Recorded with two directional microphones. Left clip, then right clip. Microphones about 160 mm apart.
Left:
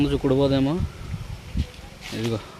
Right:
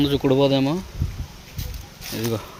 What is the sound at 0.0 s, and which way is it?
Speech, 10° right (ahead or behind).